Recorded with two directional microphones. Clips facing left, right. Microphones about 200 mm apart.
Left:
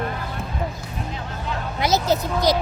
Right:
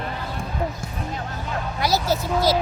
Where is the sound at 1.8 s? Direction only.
20° left (ahead or behind).